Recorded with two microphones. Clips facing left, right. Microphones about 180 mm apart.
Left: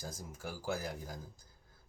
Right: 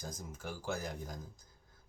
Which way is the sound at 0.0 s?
10° left (ahead or behind).